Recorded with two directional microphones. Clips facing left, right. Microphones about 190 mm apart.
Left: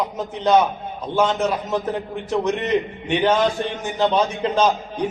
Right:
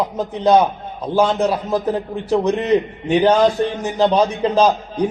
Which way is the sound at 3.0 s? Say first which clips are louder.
Right 5 dB; 35° right (ahead or behind).